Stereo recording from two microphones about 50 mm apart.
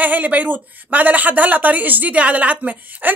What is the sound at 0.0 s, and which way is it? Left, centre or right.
Speech, right.